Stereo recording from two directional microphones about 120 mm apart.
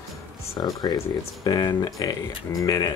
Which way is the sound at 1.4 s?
35° left (ahead or behind).